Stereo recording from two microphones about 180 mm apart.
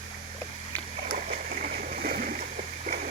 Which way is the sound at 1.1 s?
45° right (ahead or behind).